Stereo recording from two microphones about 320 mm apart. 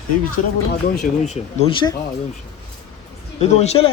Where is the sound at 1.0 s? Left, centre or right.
Centre.